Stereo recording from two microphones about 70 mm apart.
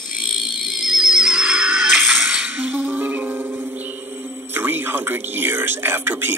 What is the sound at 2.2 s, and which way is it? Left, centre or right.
Music, centre.